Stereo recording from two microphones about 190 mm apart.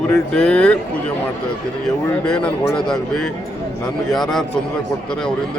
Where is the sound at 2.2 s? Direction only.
5° left (ahead or behind).